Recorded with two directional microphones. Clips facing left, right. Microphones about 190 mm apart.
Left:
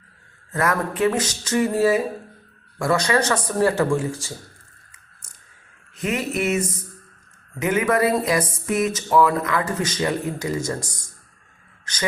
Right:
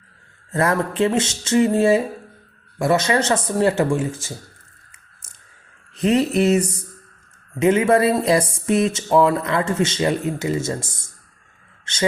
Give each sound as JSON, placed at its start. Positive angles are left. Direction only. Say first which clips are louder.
{"t": 0.5, "sound": "speech", "louder": "right 3 dB", "side_deg": -30}
{"t": 6.0, "sound": "a sound", "louder": "right 7 dB", "side_deg": -35}
{"t": 7.6, "sound": "speech", "louder": "right 4 dB", "side_deg": -30}